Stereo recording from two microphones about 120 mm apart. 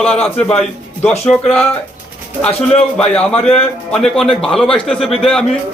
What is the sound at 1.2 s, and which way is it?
Speech, 5° left (ahead or behind).